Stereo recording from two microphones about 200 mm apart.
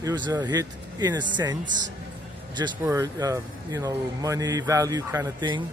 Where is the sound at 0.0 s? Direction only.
20° right (ahead or behind).